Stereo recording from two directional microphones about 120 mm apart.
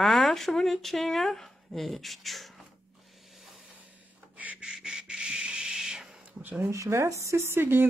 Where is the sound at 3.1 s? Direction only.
Centre (ahead or behind).